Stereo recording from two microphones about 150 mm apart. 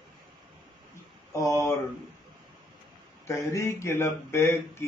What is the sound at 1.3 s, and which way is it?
Speech, 20° left (ahead or behind).